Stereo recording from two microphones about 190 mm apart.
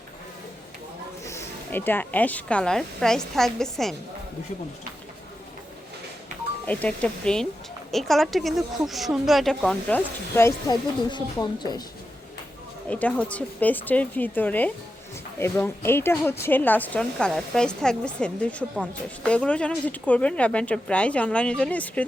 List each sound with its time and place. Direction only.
1.2 s a woman's voice: 15° left (ahead or behind)
6.7 s a woman's voice: 5° left (ahead or behind)
10.3 s speech: 15° left (ahead or behind)
12.9 s a woman's voice: 5° left (ahead or behind)